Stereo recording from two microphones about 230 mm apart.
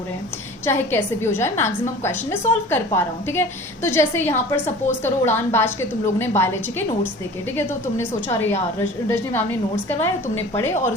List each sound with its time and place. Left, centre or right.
0.6 s a woman's voice: centre